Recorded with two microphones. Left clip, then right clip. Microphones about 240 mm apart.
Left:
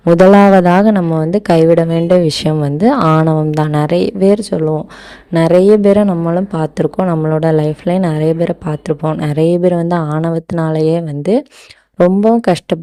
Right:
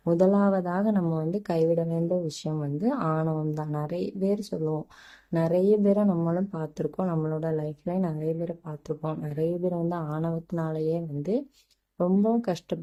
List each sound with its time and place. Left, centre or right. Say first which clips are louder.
0.3 s a woman's voice: left 18 dB; left